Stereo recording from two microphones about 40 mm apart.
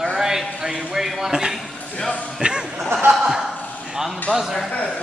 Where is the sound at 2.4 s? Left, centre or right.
Right.